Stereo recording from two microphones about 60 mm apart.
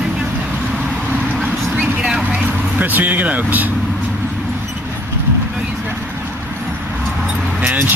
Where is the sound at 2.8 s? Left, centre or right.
Right.